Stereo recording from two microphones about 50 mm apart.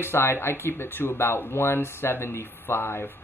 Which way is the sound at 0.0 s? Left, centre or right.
Left.